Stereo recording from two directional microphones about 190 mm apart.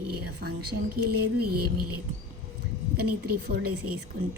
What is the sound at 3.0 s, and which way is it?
Speech, 55° right (ahead or behind).